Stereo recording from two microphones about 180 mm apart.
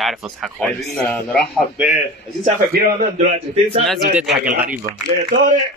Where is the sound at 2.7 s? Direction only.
60° right (ahead or behind).